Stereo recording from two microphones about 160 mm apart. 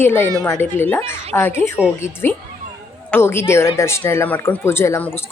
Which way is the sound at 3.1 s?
15° left (ahead or behind).